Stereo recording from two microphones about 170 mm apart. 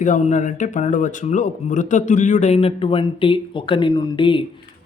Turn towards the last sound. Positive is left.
turn(degrees=30)  # may be behind; listen again after turning